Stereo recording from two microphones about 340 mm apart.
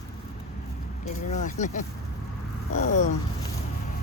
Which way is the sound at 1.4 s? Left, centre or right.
Left.